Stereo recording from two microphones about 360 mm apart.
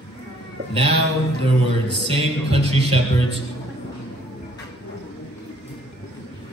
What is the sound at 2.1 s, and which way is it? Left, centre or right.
Speech, centre.